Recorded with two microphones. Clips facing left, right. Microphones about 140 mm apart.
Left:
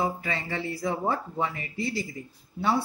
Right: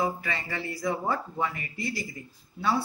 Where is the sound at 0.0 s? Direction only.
25° left (ahead or behind).